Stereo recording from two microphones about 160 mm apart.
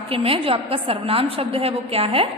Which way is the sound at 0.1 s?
35° right (ahead or behind).